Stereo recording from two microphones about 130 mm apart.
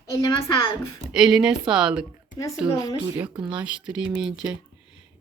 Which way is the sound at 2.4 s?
30° left (ahead or behind).